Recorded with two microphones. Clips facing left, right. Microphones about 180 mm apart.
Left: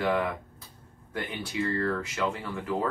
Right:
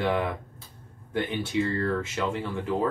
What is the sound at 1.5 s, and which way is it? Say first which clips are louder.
Speech: right 4 dB; 30° right (ahead or behind).